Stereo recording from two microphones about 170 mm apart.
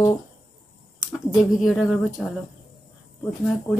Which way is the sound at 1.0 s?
Centre (ahead or behind).